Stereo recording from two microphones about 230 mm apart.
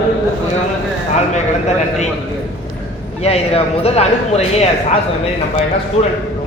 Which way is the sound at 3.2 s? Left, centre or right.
Left.